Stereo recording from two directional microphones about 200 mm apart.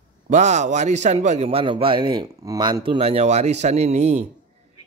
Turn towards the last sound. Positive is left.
turn(degrees=-35)  # may be behind; listen again after turning